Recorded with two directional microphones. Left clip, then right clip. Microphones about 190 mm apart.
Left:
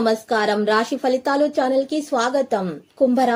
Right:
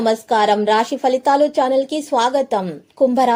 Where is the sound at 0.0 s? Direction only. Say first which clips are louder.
Right 4 dB; 20° right (ahead or behind).